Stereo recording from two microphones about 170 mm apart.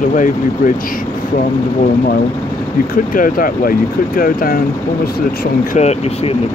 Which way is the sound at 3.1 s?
55° left (ahead or behind).